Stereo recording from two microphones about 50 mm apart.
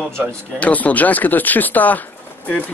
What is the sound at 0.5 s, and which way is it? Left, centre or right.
Speech, left.